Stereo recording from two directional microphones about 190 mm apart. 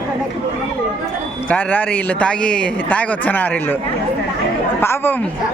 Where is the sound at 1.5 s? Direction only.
10° left (ahead or behind).